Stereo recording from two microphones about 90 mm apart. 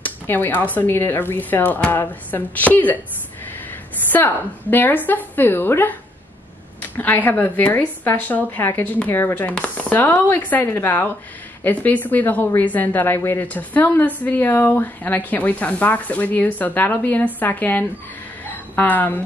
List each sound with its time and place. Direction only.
0.0 s speech: 20° left (ahead or behind)
4.1 s speech: 20° left (ahead or behind)